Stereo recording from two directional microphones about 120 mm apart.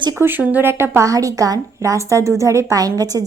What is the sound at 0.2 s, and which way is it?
A woman's voice, 15° right (ahead or behind).